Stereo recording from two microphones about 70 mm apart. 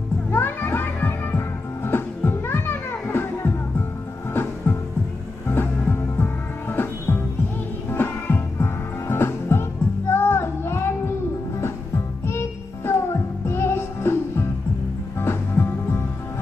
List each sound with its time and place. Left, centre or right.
0.3 s music: left
6.1 s music: left
12.3 s music: left